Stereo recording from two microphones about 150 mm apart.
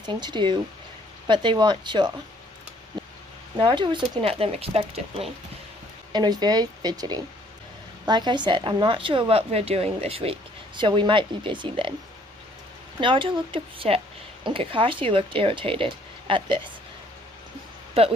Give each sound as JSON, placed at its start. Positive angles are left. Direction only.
{"t": 0.0, "sound": "speech", "side_deg": -30}
{"t": 3.6, "sound": "speech", "side_deg": -35}
{"t": 6.1, "sound": "speech", "side_deg": -30}
{"t": 13.0, "sound": "speech", "side_deg": -35}
{"t": 18.0, "sound": "speech", "side_deg": -40}